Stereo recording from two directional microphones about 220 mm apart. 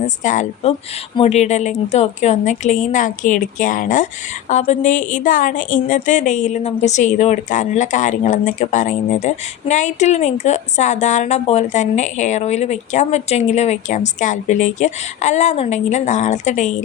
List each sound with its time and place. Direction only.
0.2 s a woman's voice: 35° left (ahead or behind)